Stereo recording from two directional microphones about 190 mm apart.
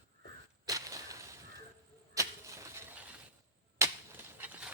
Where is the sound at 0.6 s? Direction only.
15° right (ahead or behind).